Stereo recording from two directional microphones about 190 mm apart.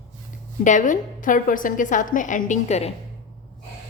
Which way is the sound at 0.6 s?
40° left (ahead or behind).